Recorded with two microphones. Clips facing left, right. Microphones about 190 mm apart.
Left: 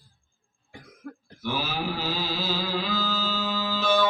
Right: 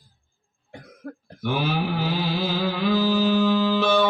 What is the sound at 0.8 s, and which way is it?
Cough, 55° right (ahead or behind).